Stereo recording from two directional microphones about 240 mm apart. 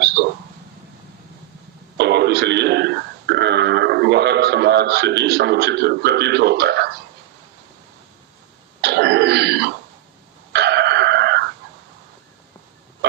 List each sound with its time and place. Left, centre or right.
2.0 s radio: right
8.8 s throat clearing: right
10.5 s a sound: right